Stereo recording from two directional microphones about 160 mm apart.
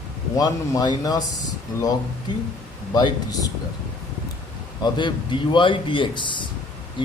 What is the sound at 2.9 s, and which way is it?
Speech, 25° left (ahead or behind).